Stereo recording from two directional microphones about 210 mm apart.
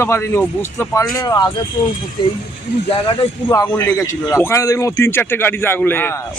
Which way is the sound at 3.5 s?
15° left (ahead or behind).